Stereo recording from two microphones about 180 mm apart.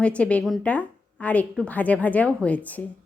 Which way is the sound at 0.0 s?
5° left (ahead or behind).